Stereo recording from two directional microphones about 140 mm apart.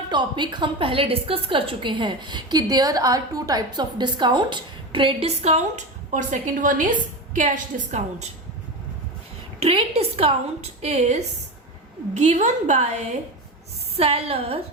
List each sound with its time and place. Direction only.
0.1 s a woman's voice: 35° right (ahead or behind); by 5.8 s 50° right (ahead or behind)
6.1 s a woman's voice: 65° right (ahead or behind)
9.6 s a woman's voice: 45° right (ahead or behind)
13.9 s a woman's voice: 45° right (ahead or behind)